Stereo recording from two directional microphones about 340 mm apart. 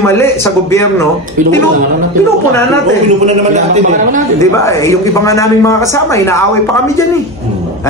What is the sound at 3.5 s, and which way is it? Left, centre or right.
Speech, right.